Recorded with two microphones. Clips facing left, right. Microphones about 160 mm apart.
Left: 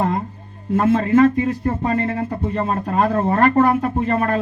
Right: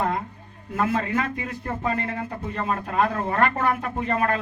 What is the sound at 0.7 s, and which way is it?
Speech, 30° left (ahead or behind).